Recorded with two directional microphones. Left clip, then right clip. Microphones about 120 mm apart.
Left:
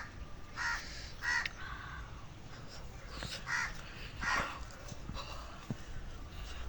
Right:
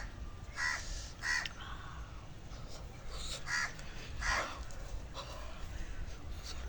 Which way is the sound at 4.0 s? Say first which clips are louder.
Left 1 dB; 35° right (ahead or behind).